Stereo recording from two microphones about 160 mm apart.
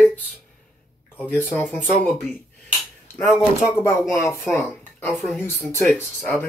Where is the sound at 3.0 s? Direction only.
15° left (ahead or behind).